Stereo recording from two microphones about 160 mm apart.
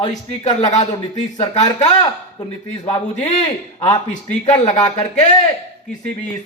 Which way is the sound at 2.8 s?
40° left (ahead or behind).